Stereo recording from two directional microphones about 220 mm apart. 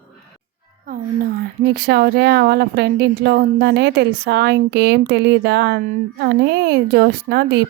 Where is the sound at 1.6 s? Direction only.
45° right (ahead or behind).